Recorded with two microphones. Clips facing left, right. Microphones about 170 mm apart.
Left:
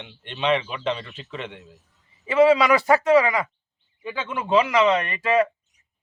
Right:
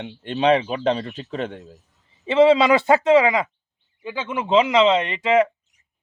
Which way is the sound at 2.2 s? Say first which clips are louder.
Right 2 dB; 25° right (ahead or behind).